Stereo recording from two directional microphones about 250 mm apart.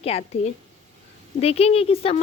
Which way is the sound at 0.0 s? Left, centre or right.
Left.